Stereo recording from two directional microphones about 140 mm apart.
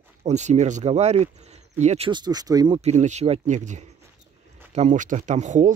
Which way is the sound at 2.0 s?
30° right (ahead or behind).